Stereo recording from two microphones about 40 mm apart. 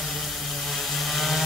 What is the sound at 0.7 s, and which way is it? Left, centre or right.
Chainsaw, centre.